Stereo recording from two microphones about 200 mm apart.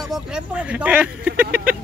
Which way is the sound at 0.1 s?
5° right (ahead or behind).